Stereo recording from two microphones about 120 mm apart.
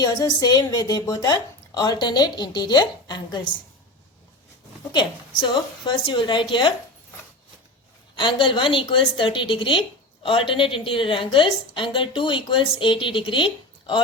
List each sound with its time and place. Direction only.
0.0 s a woman's voice: 30° left (ahead or behind)
4.9 s a woman's voice: 40° left (ahead or behind)
8.1 s a woman's voice: 40° left (ahead or behind)